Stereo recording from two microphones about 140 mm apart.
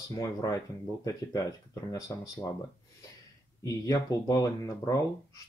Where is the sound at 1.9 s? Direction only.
25° left (ahead or behind).